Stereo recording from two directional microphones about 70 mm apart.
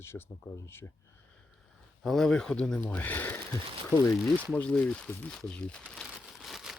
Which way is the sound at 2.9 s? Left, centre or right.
Left.